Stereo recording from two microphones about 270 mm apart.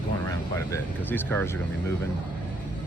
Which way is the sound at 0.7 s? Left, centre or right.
Centre.